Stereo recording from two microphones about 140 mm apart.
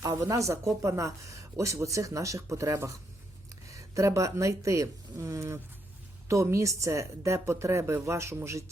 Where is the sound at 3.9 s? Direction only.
20° right (ahead or behind).